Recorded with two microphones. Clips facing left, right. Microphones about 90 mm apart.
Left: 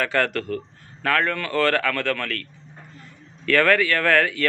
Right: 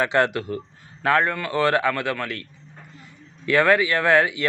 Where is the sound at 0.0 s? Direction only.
20° right (ahead or behind).